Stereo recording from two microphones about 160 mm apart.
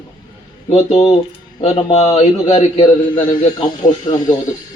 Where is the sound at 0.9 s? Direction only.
35° left (ahead or behind).